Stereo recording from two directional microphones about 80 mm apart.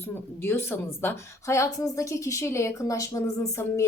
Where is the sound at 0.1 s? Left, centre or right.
Left.